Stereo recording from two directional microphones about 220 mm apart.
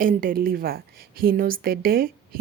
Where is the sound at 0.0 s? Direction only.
40° right (ahead or behind).